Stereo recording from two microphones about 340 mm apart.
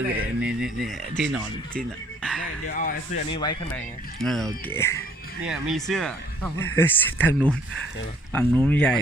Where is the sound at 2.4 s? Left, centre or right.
Left.